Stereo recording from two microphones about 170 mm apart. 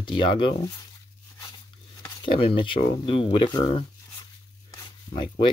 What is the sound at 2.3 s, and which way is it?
Speech, 30° left (ahead or behind).